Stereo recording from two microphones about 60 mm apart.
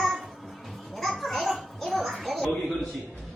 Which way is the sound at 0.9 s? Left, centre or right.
Centre.